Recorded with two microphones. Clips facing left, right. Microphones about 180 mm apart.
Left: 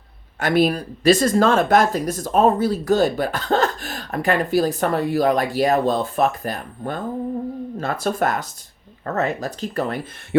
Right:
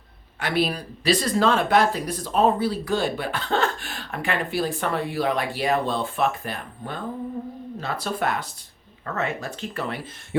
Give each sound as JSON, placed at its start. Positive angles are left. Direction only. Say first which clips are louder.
{"t": 0.3, "sound": "speech", "louder": "left 6 dB", "side_deg": 45}